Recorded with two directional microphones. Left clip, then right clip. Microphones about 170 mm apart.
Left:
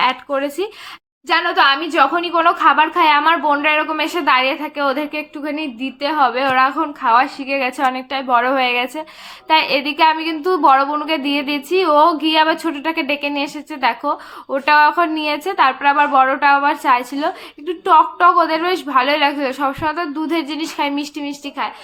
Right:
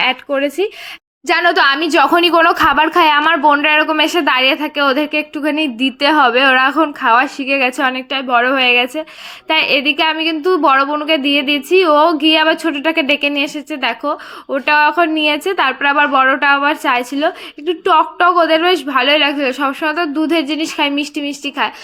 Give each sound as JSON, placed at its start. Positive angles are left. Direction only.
{"t": 0.0, "sound": "a woman's voice", "side_deg": -20}
{"t": 1.3, "sound": "a woman's voice", "side_deg": -55}
{"t": 3.2, "sound": "a woman's voice", "side_deg": -35}
{"t": 6.1, "sound": "a woman's voice", "side_deg": -35}